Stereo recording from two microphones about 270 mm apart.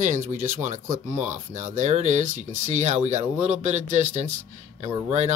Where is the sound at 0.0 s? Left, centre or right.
Right.